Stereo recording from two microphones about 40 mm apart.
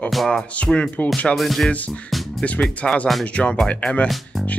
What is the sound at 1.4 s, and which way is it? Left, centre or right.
Speech, centre.